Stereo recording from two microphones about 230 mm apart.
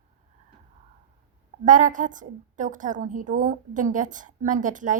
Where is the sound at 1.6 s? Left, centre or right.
Right.